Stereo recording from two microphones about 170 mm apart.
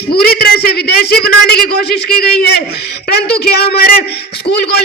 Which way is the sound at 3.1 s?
70° left (ahead or behind).